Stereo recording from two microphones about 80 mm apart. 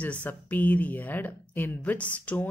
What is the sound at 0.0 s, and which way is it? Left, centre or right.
Speech, centre.